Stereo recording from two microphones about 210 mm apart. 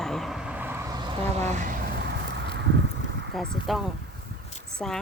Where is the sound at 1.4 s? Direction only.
35° right (ahead or behind).